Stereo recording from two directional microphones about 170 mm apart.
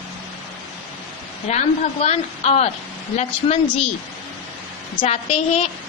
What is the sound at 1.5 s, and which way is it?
A woman's voice, 40° left (ahead or behind).